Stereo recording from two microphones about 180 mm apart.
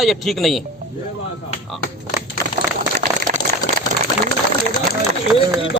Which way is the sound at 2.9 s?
50° right (ahead or behind).